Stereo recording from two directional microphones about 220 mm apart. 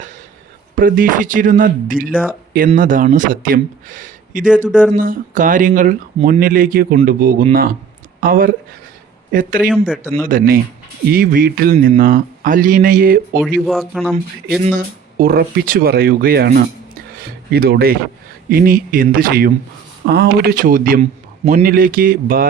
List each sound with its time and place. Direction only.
0.8 s speech: 40° right (ahead or behind)
9.6 s speech: 5° right (ahead or behind)
10.2 s speech: 40° right (ahead or behind)
13.7 s speech: centre (ahead or behind)
14.6 s speech: 40° right (ahead or behind)